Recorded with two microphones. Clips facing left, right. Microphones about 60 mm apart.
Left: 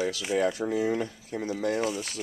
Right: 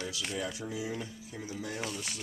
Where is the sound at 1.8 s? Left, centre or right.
Centre.